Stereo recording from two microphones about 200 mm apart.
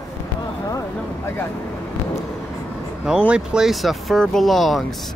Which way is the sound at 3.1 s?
5° right (ahead or behind).